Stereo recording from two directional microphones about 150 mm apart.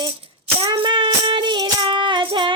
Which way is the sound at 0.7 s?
30° right (ahead or behind).